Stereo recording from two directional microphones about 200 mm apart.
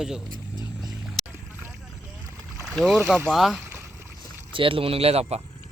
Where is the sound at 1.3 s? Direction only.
10° right (ahead or behind).